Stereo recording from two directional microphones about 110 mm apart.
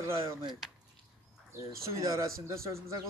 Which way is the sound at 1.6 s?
30° right (ahead or behind).